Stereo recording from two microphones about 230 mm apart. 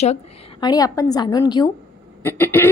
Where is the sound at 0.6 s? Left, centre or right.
Centre.